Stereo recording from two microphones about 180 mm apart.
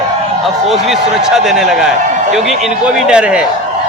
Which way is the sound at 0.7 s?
Centre (ahead or behind).